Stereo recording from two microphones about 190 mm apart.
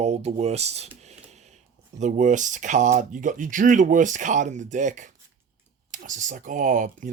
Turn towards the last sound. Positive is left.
turn(degrees=-45)  # may be behind; listen again after turning